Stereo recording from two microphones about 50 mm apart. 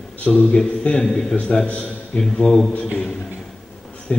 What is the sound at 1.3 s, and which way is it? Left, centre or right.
Speech, left.